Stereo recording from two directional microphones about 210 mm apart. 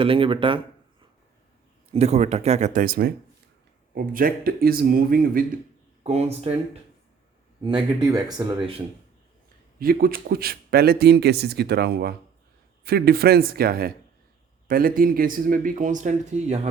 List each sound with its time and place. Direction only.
0.0 s speech: 25° right (ahead or behind)
1.9 s a man's voice: 30° right (ahead or behind)
6.0 s speech: 30° right (ahead or behind)
7.9 s speech: 20° right (ahead or behind)
9.7 s a man's voice: 45° right (ahead or behind)